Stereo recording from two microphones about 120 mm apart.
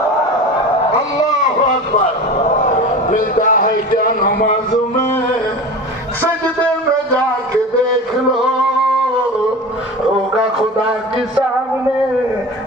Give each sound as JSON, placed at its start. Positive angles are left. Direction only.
{"t": 0.9, "sound": "a sound", "side_deg": 30}
{"t": 3.1, "sound": "a man's voice", "side_deg": 90}
{"t": 4.7, "sound": "music", "side_deg": 25}